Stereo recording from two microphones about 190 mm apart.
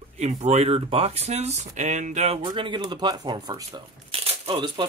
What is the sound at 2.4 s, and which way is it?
Speech, 25° right (ahead or behind).